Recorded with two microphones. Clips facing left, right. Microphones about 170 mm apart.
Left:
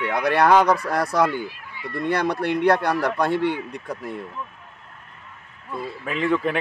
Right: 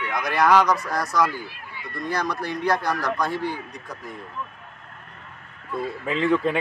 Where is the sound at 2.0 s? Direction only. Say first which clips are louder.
Left 4 dB; 60° left (ahead or behind).